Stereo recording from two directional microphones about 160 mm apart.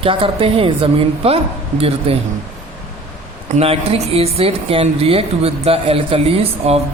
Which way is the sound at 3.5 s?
40° right (ahead or behind).